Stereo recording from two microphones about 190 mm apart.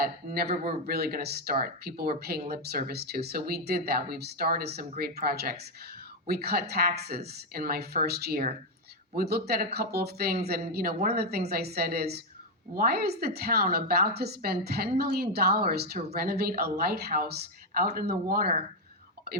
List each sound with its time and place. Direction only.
0.0 s a woman's voice: 55° right (ahead or behind)